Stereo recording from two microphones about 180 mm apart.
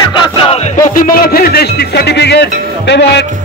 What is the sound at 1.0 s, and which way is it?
A man's voice, 55° left (ahead or behind).